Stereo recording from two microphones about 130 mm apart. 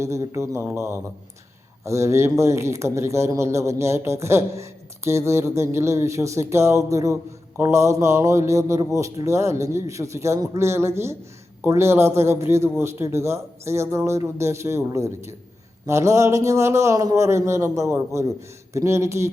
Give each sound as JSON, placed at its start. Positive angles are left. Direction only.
{"t": 0.0, "sound": "speech", "side_deg": -25}